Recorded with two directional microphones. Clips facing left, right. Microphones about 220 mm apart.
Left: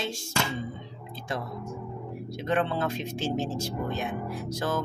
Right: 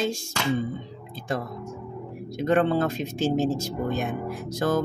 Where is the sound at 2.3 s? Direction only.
45° right (ahead or behind).